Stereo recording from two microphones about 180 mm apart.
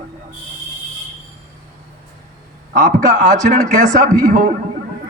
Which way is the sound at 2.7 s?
45° right (ahead or behind).